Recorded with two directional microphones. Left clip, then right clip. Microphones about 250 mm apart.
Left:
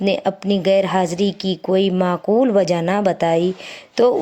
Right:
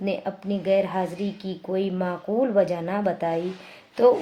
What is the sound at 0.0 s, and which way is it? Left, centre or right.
A woman's voice, left.